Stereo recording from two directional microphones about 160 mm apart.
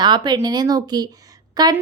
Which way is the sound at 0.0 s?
30° right (ahead or behind).